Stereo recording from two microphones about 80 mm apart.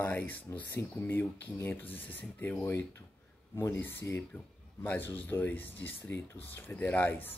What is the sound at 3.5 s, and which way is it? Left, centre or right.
Speech, left.